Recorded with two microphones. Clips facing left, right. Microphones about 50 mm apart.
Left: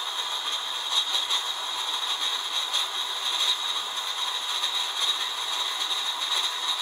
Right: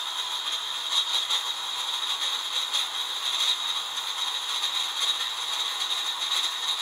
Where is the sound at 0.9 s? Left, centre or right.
Centre.